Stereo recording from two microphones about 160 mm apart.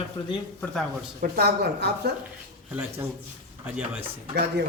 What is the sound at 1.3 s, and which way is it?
Speech, 80° right.